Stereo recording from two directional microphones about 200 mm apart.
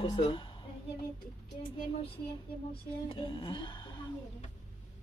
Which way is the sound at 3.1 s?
25° left (ahead or behind).